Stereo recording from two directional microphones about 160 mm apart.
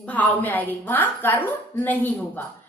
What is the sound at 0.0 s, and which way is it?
A woman's voice, 10° left (ahead or behind).